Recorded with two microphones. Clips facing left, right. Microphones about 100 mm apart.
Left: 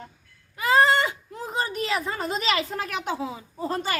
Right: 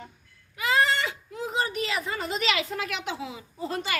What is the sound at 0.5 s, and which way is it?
Speech, 35° left (ahead or behind).